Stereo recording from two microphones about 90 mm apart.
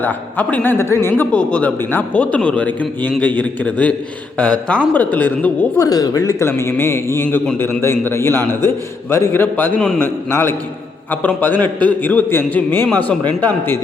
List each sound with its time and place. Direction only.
0.0 s a man's voice: 20° left (ahead or behind)
2.3 s a man's voice: 15° left (ahead or behind)
5.7 s speech: 40° left (ahead or behind)
6.5 s a man's voice: 25° left (ahead or behind)